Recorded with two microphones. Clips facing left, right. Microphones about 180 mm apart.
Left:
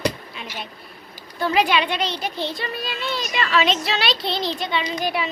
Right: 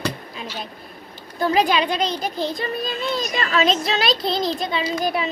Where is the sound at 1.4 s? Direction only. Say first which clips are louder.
Right 1 dB; 35° right (ahead or behind).